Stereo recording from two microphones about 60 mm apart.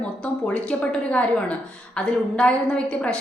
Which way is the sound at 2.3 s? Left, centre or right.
Centre.